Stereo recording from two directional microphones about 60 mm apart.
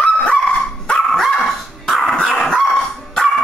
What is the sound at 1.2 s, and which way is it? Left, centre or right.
Dog, centre.